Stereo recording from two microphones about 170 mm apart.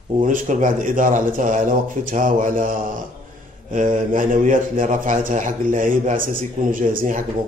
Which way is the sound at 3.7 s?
50° right (ahead or behind).